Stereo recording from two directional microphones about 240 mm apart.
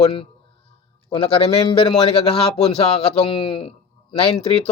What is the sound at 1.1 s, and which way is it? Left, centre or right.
Speech, left.